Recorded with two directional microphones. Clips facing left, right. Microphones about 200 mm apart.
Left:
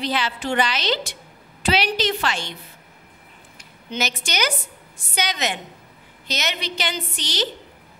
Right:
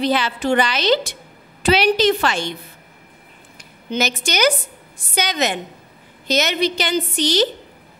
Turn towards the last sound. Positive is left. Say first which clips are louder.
# right 10 dB
turn(degrees=-45)  # may be behind; listen again after turning